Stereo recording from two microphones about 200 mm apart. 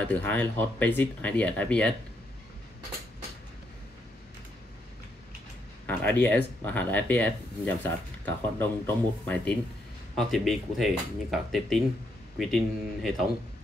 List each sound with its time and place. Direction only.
0.0 s speech: 10° left (ahead or behind)
5.9 s speech: 10° left (ahead or behind)